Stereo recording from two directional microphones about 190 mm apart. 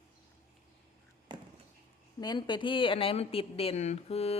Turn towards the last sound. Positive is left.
turn(degrees=35)  # may be behind; listen again after turning